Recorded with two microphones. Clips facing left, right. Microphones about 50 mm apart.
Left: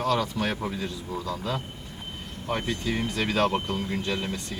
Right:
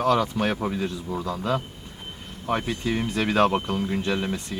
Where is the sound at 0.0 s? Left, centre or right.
Centre.